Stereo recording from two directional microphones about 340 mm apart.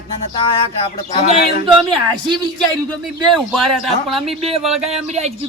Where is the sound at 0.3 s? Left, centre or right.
Centre.